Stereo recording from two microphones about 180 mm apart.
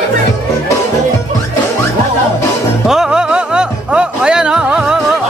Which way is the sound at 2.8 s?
5° right (ahead or behind).